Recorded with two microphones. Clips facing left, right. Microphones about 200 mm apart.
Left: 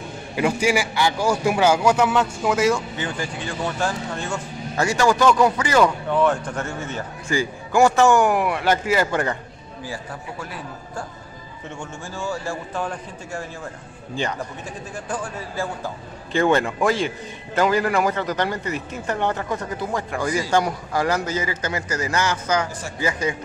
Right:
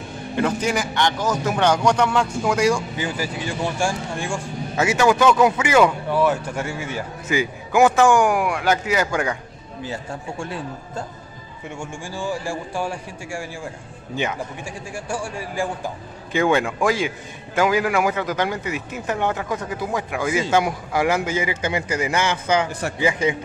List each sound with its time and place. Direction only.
0.4 s a man's voice: 10° left (ahead or behind)
3.0 s speech: 10° right (ahead or behind)
7.7 s a man's voice: centre (ahead or behind)
10.4 s a man's voice: 25° right (ahead or behind)
11.8 s speech: 15° right (ahead or behind)
15.0 s a man's voice: 10° right (ahead or behind)